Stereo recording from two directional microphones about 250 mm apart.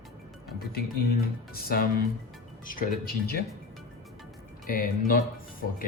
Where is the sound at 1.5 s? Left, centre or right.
Left.